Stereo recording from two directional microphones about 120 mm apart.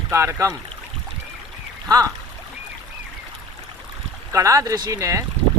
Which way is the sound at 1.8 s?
30° right (ahead or behind).